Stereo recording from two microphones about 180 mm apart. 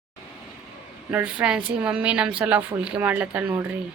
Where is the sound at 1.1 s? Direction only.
10° right (ahead or behind).